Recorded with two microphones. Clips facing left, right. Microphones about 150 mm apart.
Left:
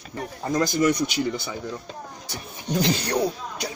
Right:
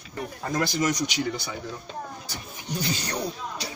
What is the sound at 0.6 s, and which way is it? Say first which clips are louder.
Speech: left 4 dB; 50° left (ahead or behind).